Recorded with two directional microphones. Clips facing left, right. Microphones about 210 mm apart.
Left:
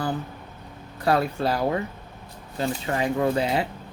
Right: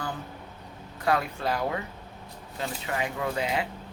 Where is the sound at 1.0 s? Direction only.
35° left (ahead or behind).